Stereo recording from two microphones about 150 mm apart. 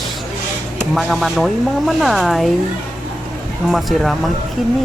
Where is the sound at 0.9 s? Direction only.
Centre (ahead or behind).